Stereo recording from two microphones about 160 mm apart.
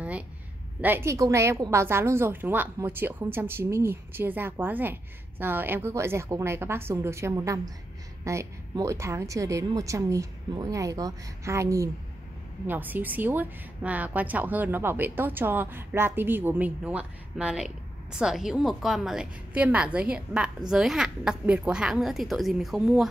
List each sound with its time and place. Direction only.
0.7 s a woman's voice: 10° right (ahead or behind)